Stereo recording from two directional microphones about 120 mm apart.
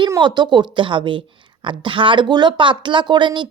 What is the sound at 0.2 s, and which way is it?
A woman's voice, 40° right (ahead or behind).